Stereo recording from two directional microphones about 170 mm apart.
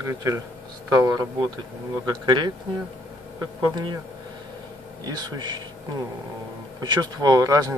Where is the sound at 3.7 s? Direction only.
25° right (ahead or behind).